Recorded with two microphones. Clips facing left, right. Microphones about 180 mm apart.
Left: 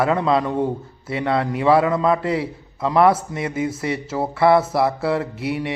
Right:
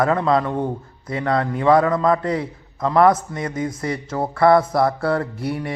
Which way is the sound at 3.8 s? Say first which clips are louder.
Left 1 dB; 25° left (ahead or behind).